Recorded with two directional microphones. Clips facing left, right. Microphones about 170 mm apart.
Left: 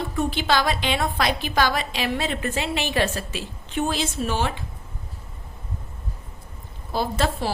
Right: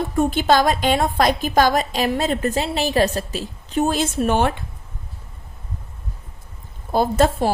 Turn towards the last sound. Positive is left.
turn(degrees=-45)  # may be behind; listen again after turning